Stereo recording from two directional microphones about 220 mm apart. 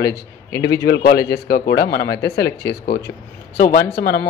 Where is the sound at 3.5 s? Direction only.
40° left (ahead or behind).